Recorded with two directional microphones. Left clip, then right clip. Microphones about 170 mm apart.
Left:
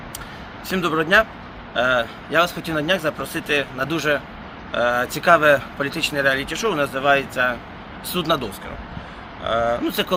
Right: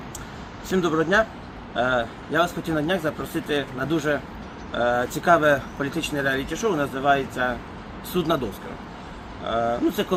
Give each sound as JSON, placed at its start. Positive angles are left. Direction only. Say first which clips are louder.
{"t": 0.7, "sound": "speech", "louder": "left 3 dB", "side_deg": 25}
{"t": 5.9, "sound": "speech", "louder": "left 6 dB", "side_deg": 75}
{"t": 6.1, "sound": "speech", "louder": "left 5 dB", "side_deg": 20}
{"t": 9.4, "sound": "speech", "louder": "left 3 dB", "side_deg": 20}